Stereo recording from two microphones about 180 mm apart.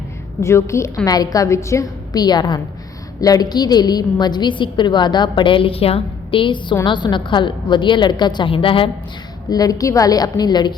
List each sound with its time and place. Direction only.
0.4 s a woman's voice: 15° left (ahead or behind)